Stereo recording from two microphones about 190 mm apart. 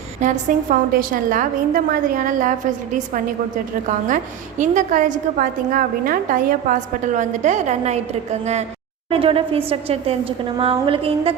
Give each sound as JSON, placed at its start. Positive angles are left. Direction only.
{"t": 0.2, "sound": "a woman's voice", "side_deg": -45}
{"t": 3.8, "sound": "a woman's voice", "side_deg": -40}